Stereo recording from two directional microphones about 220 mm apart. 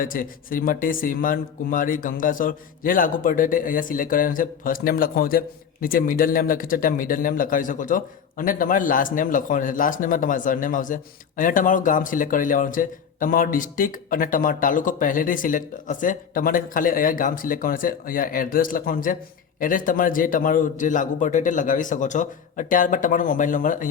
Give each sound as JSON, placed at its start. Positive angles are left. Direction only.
{"t": 0.0, "sound": "speech", "side_deg": 40}